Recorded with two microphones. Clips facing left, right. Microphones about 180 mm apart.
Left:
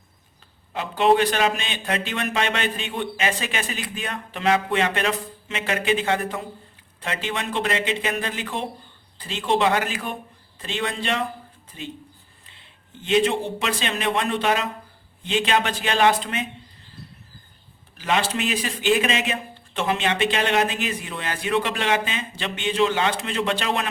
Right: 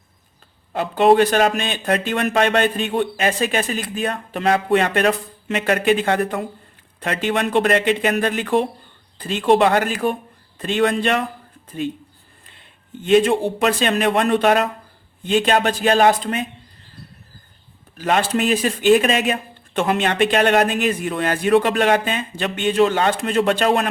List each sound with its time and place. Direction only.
0.7 s a man's voice: 45° right (ahead or behind)
17.9 s speech: 50° right (ahead or behind)